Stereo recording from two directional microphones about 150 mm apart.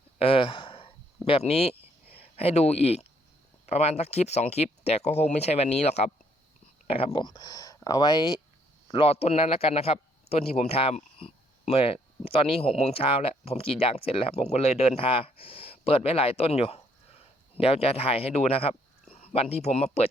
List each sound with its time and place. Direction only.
0.2 s a sound: 40° left (ahead or behind)
2.3 s speech: 40° left (ahead or behind); by 8.2 s 25° left (ahead or behind)
8.9 s a man's voice: 40° left (ahead or behind)